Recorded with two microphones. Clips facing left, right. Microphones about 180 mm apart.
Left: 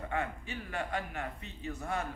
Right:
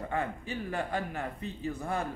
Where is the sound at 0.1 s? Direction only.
35° right (ahead or behind).